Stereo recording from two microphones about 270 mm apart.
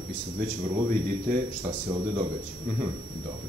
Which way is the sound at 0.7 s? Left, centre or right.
Right.